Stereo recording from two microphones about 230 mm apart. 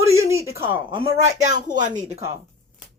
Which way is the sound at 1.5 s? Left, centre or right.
Right.